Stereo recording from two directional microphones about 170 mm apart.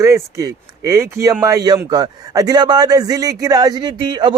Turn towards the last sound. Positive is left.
turn(degrees=-25)  # may be behind; listen again after turning